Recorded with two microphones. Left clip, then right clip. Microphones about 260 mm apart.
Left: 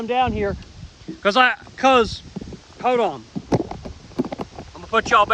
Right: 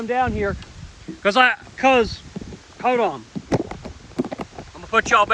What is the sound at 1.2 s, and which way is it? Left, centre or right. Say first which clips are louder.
Speech: even; centre.